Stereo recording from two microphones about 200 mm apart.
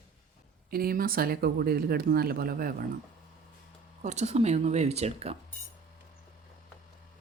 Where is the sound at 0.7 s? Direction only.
50° right (ahead or behind).